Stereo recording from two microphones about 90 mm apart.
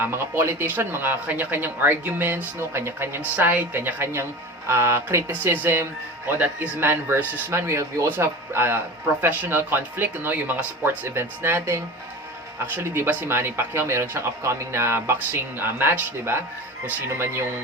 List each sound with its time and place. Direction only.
0.0 s speech: 25° right (ahead or behind)
7.5 s speech: 30° right (ahead or behind)